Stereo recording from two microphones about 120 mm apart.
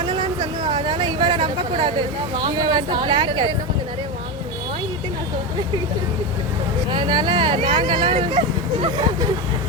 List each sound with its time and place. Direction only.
0.0 s speech: 45° right (ahead or behind)
6.9 s speech: 40° right (ahead or behind)